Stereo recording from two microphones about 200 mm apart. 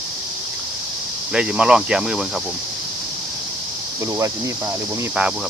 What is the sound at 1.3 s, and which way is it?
Speech, 5° right (ahead or behind).